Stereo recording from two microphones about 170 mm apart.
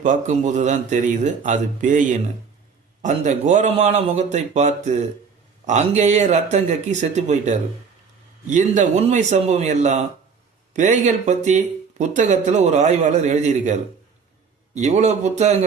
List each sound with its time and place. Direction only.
0.0 s speech: 45° right (ahead or behind)